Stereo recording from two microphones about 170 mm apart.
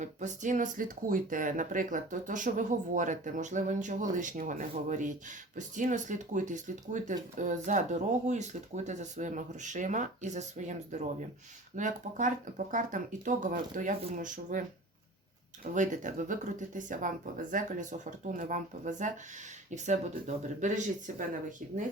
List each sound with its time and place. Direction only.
0.0 s speech: 45° right (ahead or behind)
15.7 s speech: 45° right (ahead or behind)